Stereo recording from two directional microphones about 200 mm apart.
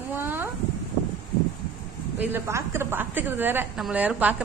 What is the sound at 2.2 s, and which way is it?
A woman's voice, 10° right (ahead or behind).